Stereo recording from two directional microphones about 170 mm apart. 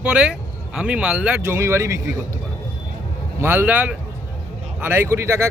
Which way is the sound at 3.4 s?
10° right (ahead or behind).